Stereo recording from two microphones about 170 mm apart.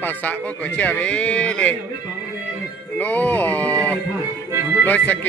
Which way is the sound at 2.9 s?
10° left (ahead or behind).